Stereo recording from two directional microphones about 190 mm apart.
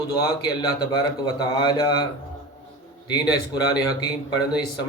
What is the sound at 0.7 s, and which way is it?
A man's voice, 20° left (ahead or behind).